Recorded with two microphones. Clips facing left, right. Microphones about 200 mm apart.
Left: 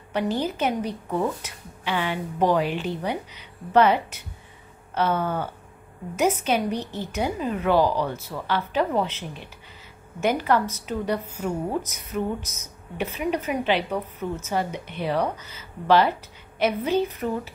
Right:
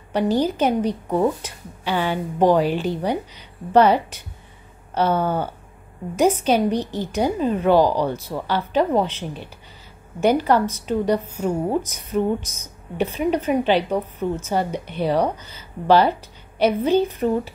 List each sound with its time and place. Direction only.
0.1 s a woman's voice: 35° right (ahead or behind)
10.2 s a woman's voice: 30° right (ahead or behind)